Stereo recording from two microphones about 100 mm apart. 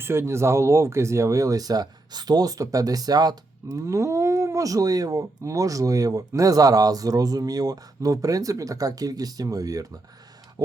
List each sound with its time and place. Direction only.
0.0 s speech: 25° right (ahead or behind)